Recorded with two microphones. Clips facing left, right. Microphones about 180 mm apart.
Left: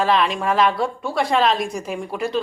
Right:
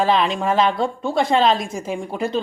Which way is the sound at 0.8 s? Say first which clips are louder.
Right 2 dB; 25° right (ahead or behind).